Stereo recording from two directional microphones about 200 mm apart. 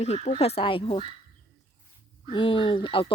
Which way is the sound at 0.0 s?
35° left (ahead or behind).